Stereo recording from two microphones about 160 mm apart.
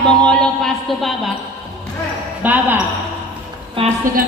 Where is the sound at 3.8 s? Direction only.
35° right (ahead or behind).